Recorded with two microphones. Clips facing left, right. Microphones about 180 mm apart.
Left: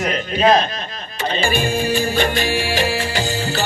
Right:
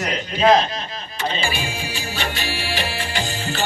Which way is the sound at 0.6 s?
50° left (ahead or behind).